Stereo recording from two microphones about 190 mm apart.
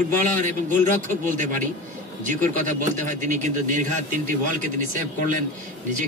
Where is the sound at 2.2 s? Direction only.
40° right (ahead or behind).